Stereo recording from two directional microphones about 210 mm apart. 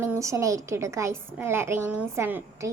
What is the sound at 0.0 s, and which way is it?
A woman's voice, 15° right (ahead or behind).